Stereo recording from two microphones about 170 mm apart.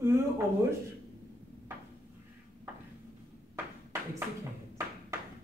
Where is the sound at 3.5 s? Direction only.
15° right (ahead or behind).